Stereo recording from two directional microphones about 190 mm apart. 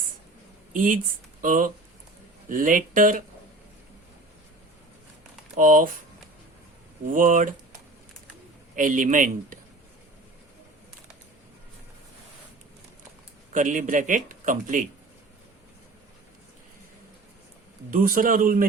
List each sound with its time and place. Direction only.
1.4 s speech: 45° right (ahead or behind)
5.5 s speech: 45° right (ahead or behind)
7.1 s speech: 45° right (ahead or behind)
8.7 s speech: 45° right (ahead or behind)
13.5 s speech: 40° right (ahead or behind)
17.9 s speech: 45° right (ahead or behind)